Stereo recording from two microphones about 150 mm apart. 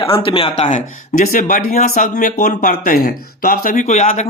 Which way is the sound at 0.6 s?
60° left (ahead or behind).